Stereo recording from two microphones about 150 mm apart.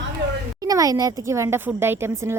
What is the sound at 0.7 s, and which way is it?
Speech, 25° right (ahead or behind).